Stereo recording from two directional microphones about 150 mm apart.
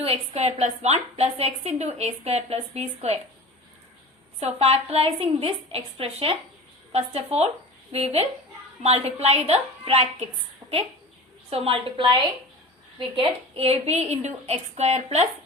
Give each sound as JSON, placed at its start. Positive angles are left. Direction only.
{"t": 0.0, "sound": "a woman's voice", "side_deg": -45}
{"t": 4.4, "sound": "a woman's voice", "side_deg": -45}
{"t": 10.6, "sound": "a sound", "side_deg": -25}
{"t": 11.5, "sound": "a woman's voice", "side_deg": -40}